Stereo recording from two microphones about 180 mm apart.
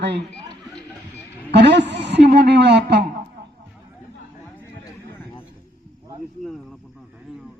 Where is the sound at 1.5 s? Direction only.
70° right (ahead or behind).